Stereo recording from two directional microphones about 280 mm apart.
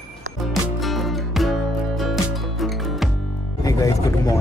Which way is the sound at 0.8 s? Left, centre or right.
Centre.